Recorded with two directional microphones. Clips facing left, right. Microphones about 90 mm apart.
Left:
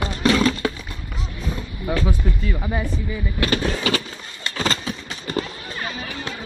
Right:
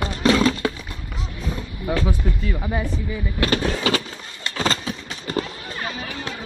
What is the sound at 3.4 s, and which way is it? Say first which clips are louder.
Speech: right 1 dB; 35° right (ahead or behind).